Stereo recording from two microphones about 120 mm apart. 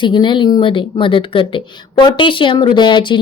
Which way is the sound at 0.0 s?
40° left (ahead or behind).